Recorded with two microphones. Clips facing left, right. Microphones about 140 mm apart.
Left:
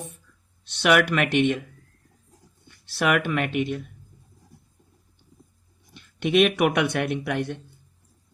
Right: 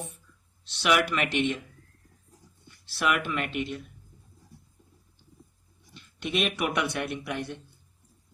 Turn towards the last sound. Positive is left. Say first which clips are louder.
# left 6 dB
turn(degrees=60)  # may be behind; listen again after turning